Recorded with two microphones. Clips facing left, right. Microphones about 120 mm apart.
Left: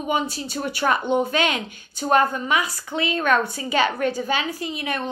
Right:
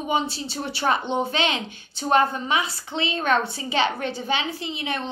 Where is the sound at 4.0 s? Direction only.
45° left (ahead or behind).